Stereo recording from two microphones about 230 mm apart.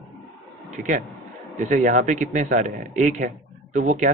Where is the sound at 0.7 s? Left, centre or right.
Right.